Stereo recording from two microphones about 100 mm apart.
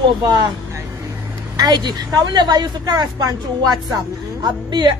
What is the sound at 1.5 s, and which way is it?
Speech, 40° right (ahead or behind).